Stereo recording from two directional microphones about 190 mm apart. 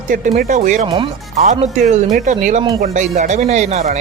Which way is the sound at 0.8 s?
30° right (ahead or behind).